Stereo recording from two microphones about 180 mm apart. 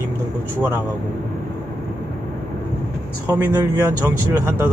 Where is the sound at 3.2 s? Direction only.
15° right (ahead or behind).